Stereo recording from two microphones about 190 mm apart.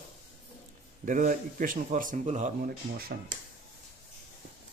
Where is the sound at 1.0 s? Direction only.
45° right (ahead or behind).